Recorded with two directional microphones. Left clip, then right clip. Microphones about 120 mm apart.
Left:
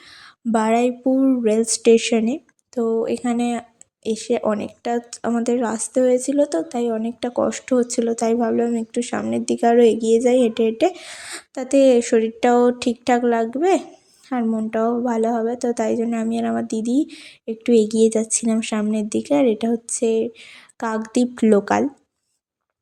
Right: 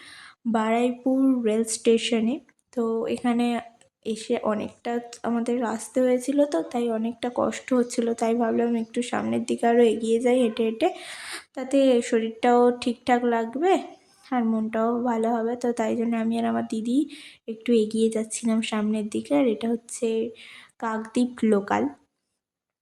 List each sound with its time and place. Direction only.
0.1 s a woman's voice: 35° left (ahead or behind)